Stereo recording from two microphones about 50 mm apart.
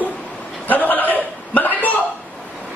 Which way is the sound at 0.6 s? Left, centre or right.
Left.